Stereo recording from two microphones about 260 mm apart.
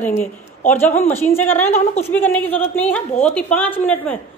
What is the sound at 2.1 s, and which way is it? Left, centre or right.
A man's voice, centre.